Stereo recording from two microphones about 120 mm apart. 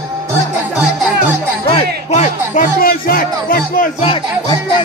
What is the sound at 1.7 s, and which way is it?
Music, 55° left (ahead or behind).